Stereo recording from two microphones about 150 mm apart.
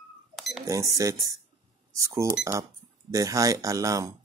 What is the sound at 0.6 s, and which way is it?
Speech, 20° right (ahead or behind).